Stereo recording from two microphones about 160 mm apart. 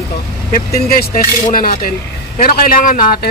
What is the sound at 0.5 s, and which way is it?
A man's voice, 65° left (ahead or behind).